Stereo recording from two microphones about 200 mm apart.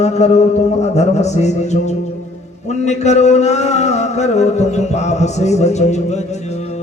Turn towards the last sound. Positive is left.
turn(degrees=35)  # may be behind; listen again after turning